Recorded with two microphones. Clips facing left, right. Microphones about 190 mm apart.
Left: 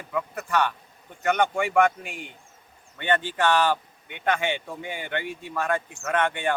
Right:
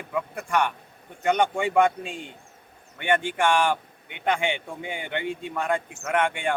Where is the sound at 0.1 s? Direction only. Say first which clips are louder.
Even; 15° right (ahead or behind).